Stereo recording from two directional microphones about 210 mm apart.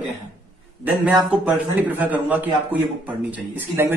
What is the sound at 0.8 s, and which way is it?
A man's voice, 5° right (ahead or behind).